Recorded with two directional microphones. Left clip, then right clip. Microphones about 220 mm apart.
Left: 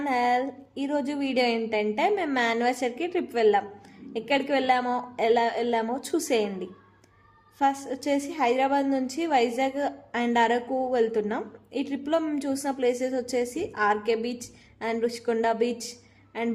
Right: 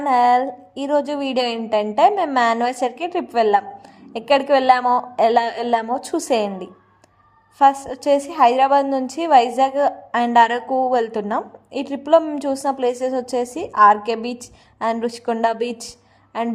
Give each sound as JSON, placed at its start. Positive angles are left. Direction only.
{"t": 0.0, "sound": "a woman's voice", "side_deg": -20}